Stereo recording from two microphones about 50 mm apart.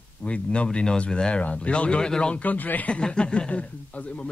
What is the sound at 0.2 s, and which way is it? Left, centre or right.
Speech, left.